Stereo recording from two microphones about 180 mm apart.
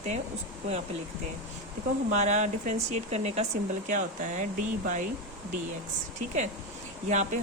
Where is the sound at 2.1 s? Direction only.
40° right (ahead or behind).